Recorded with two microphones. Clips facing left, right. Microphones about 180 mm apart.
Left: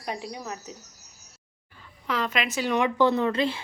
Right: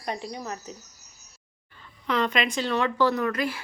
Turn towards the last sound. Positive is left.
turn(degrees=25)  # may be behind; listen again after turning